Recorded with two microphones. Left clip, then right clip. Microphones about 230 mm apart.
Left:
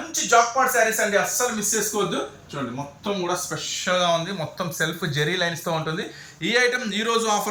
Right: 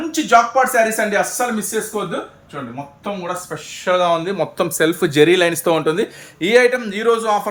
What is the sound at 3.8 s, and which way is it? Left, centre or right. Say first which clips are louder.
Speech: right 6 dB; right.